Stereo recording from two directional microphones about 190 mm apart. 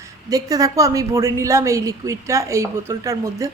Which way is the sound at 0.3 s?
20° right (ahead or behind).